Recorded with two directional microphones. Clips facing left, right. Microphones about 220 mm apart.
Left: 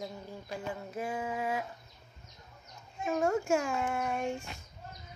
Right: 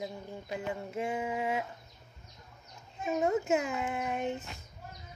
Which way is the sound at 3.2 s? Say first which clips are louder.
Right 1 dB; 20° right (ahead or behind).